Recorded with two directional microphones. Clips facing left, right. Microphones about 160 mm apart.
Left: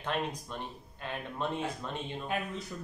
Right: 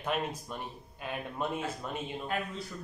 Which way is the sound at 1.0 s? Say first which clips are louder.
Right 1 dB; 10° right (ahead or behind).